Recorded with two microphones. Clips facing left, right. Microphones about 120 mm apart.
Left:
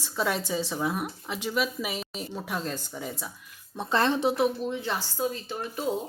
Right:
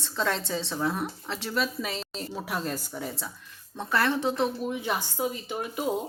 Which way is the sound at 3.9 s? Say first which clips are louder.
Left 2 dB; 25° left (ahead or behind).